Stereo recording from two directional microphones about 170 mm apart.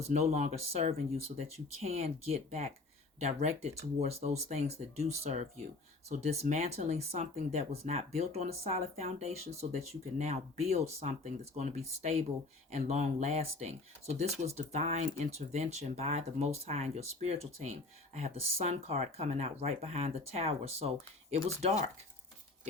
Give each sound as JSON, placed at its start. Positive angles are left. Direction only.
{"t": 0.0, "sound": "speech", "side_deg": -40}